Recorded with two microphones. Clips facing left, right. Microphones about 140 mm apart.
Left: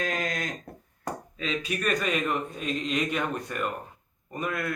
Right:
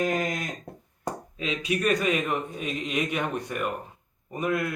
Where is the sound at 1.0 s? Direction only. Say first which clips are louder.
Right 1 dB; 10° right (ahead or behind).